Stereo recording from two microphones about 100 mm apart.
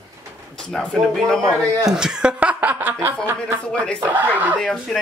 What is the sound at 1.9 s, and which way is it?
Speech, 5° right (ahead or behind).